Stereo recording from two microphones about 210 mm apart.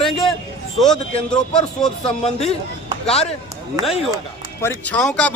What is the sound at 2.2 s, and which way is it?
Speech, 30° left (ahead or behind).